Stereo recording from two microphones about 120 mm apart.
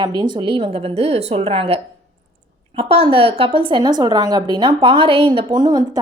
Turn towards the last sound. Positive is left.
turn(degrees=-35)  # may be behind; listen again after turning